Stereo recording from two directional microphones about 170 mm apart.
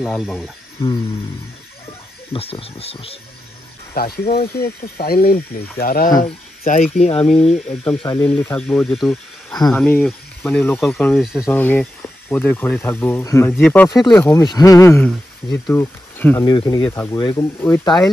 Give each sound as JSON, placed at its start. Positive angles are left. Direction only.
{"t": 0.0, "sound": "speech", "side_deg": 0}
{"t": 0.7, "sound": "a sound", "side_deg": 25}
{"t": 2.3, "sound": "speech", "side_deg": 35}
{"t": 3.9, "sound": "speech", "side_deg": 60}
{"t": 6.6, "sound": "speech", "side_deg": 45}
{"t": 7.5, "sound": "speech", "side_deg": 5}
{"t": 16.4, "sound": "speech", "side_deg": 25}
{"t": 16.8, "sound": "speech", "side_deg": 15}
{"t": 17.2, "sound": "speech", "side_deg": 25}
{"t": 17.6, "sound": "speech", "side_deg": 10}